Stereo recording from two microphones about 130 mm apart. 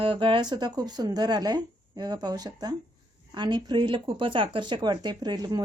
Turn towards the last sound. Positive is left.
turn(degrees=-30)  # may be behind; listen again after turning